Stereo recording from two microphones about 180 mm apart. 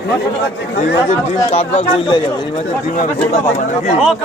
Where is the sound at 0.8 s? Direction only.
35° left (ahead or behind).